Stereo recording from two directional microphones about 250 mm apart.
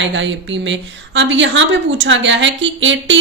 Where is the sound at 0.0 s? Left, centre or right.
Right.